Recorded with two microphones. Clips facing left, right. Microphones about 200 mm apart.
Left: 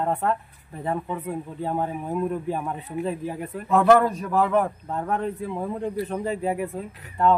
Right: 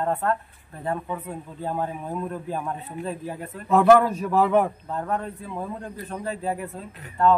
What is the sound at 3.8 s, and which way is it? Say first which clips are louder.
Speech: right 1 dB; 5° right (ahead or behind).